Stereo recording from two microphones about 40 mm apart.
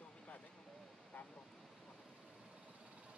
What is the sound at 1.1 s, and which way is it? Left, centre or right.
Vehicle, left.